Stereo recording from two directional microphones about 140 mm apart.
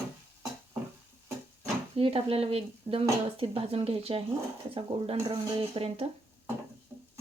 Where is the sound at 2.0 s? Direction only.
45° right (ahead or behind).